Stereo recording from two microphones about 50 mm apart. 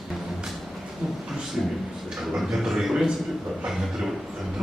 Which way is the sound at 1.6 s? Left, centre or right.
Centre.